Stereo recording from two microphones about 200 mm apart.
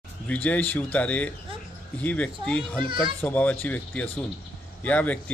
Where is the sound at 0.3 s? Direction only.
5° left (ahead or behind).